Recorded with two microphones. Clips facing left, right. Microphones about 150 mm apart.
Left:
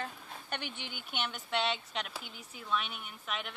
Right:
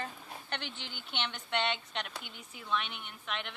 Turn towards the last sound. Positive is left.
turn(degrees=5)  # may be behind; listen again after turning